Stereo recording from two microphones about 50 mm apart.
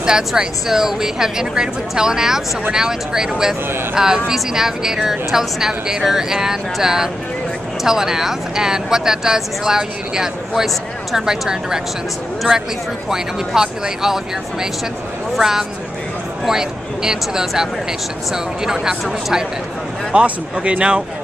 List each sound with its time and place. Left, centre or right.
0.0 s speech: centre
20.1 s speech: right